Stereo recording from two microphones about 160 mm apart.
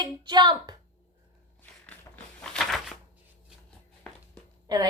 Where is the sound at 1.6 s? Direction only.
10° left (ahead or behind).